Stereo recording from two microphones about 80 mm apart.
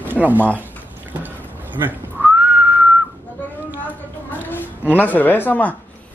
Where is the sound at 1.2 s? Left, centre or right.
Right.